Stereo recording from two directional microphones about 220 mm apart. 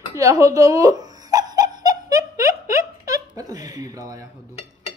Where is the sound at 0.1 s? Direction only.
15° right (ahead or behind).